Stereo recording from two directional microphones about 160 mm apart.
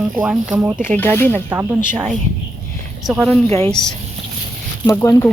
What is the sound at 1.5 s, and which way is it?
Speech, 10° right (ahead or behind).